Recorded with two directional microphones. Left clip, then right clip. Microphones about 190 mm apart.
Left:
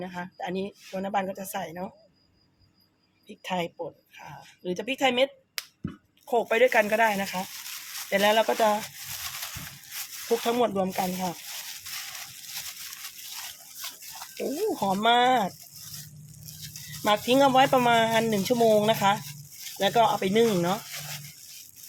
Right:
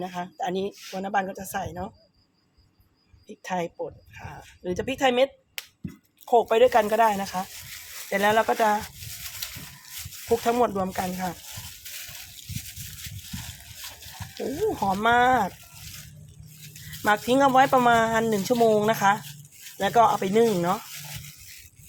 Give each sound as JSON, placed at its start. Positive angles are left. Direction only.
{"t": 0.0, "sound": "speech", "side_deg": -25}
{"t": 0.9, "sound": "speech", "side_deg": -15}
{"t": 3.2, "sound": "speech", "side_deg": -10}
{"t": 10.2, "sound": "speech", "side_deg": -5}
{"t": 14.8, "sound": "speech", "side_deg": 0}
{"t": 17.0, "sound": "speech", "side_deg": 0}